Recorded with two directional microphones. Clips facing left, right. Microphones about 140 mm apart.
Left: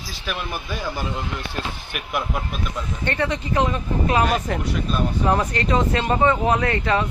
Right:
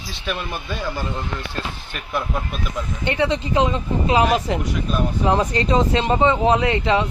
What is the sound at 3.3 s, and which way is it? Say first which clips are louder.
Speech: right 2 dB; 20° right (ahead or behind).